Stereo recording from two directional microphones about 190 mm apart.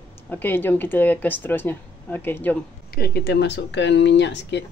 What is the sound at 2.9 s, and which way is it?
Speech, 55° left (ahead or behind).